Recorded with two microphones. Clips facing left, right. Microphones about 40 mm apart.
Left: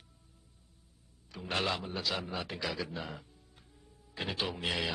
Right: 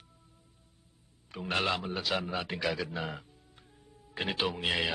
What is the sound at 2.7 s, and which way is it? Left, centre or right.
Speech, centre.